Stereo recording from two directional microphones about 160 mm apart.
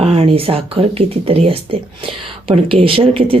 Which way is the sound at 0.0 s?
35° right (ahead or behind).